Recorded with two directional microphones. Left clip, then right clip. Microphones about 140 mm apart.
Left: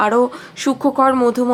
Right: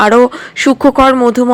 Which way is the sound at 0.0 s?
35° right (ahead or behind).